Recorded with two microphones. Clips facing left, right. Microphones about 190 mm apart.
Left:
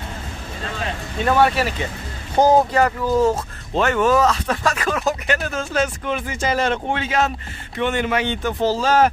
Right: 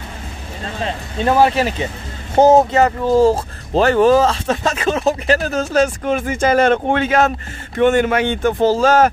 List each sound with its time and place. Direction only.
1.2 s speech: 25° right (ahead or behind); by 9.1 s 45° right (ahead or behind)